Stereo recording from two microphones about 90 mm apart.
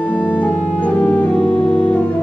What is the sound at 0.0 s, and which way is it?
Music, 15° left (ahead or behind).